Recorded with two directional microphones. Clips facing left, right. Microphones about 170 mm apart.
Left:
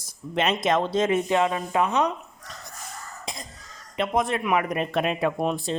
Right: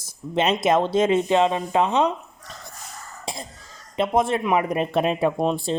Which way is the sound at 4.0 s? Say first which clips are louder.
Right 4 dB; 30° right (ahead or behind).